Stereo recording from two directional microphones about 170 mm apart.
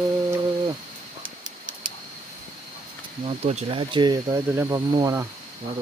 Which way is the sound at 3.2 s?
35° right (ahead or behind).